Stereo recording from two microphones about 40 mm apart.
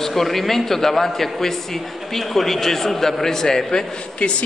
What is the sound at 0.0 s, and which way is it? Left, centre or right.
A man's voice, centre.